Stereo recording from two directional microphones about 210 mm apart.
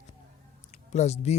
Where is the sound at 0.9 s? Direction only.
30° left (ahead or behind).